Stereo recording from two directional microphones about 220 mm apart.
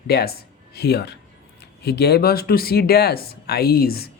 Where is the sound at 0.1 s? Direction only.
45° left (ahead or behind).